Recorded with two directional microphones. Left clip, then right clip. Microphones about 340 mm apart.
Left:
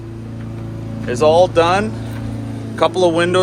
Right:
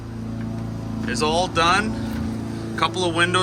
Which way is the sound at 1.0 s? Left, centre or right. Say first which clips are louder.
Left 10 dB; centre.